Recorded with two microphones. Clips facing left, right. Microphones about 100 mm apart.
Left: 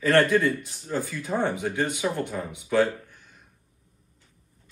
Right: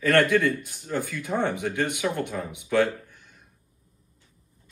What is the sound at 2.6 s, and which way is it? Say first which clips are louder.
Speech: even; 15° left (ahead or behind).